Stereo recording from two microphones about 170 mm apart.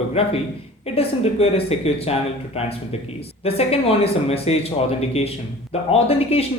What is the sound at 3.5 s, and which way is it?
A man's voice, 35° left (ahead or behind).